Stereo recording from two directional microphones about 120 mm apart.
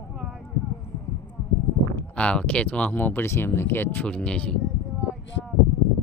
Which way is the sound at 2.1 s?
10° left (ahead or behind).